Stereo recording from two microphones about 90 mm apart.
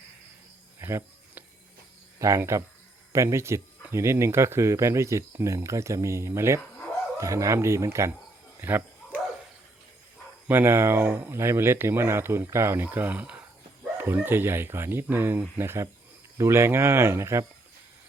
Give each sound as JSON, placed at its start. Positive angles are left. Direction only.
{"t": 0.8, "sound": "a sound", "side_deg": -30}
{"t": 2.1, "sound": "speech", "side_deg": -35}
{"t": 8.6, "sound": "dog", "side_deg": -20}
{"t": 10.5, "sound": "speech", "side_deg": -25}